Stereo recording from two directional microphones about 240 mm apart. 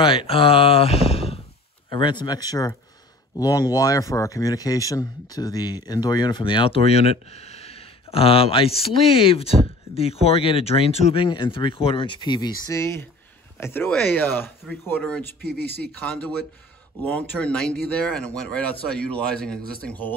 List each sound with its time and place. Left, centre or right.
0.0 s speech: left; by 15.2 s centre
15.4 s speech: right
17.0 s speech: centre